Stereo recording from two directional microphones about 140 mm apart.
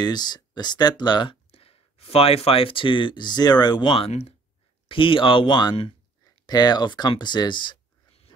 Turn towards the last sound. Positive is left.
turn(degrees=35)  # may be behind; listen again after turning